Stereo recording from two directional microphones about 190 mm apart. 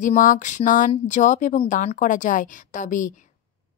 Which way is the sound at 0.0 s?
45° left (ahead or behind).